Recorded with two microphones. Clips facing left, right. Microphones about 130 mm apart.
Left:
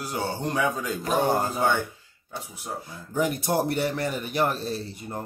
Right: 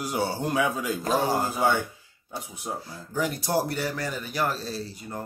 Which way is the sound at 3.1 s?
20° left (ahead or behind).